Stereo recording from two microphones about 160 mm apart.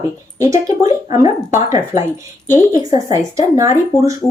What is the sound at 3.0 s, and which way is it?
Speech, 20° right (ahead or behind).